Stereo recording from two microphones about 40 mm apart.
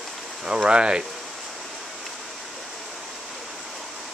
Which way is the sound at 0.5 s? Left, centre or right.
Right.